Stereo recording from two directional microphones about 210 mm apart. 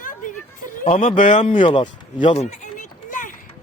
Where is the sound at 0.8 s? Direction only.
30° left (ahead or behind).